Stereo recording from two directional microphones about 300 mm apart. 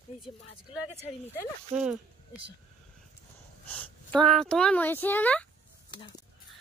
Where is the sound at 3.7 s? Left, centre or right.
Centre.